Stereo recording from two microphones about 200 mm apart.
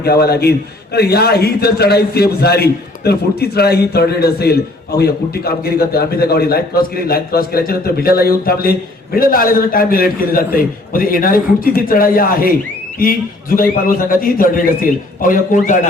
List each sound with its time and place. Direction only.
0.0 s a man's voice: 50° left (ahead or behind)